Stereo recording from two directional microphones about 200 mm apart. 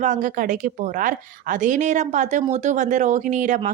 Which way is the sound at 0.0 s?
40° right (ahead or behind).